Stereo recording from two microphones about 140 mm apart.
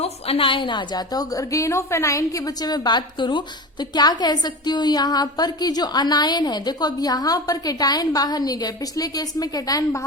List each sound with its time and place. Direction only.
0.0 s a woman's voice: 45° left (ahead or behind); by 10.0 s 25° left (ahead or behind)